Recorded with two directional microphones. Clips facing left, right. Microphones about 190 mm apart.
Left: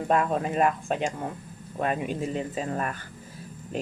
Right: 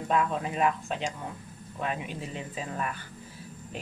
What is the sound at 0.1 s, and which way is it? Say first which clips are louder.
Speech: left 3 dB; 50° left (ahead or behind).